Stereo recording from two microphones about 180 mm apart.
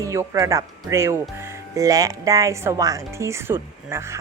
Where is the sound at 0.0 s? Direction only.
15° right (ahead or behind).